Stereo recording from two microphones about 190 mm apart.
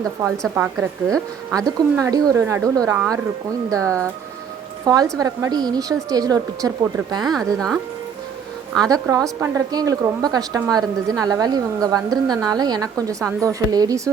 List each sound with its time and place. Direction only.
0.4 s speech: 10° right (ahead or behind)
5.1 s a woman's voice: 20° right (ahead or behind)
7.3 s speech: centre (ahead or behind)
8.8 s a woman's voice: 20° right (ahead or behind)